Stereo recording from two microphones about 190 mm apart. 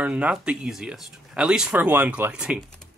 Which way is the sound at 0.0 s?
5° right (ahead or behind).